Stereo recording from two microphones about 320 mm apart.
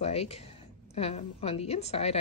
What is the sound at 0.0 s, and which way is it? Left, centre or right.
Speech, centre.